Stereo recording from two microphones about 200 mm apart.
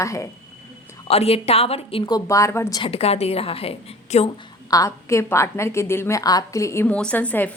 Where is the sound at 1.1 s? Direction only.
30° left (ahead or behind); by 2.8 s 15° left (ahead or behind).